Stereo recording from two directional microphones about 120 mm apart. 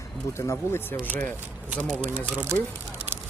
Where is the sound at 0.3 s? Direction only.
20° left (ahead or behind).